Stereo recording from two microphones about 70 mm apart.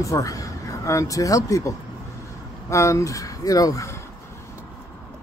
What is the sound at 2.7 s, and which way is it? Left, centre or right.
Speech, left.